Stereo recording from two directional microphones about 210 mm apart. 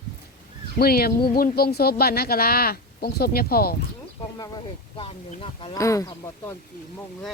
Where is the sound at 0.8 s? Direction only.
45° left (ahead or behind).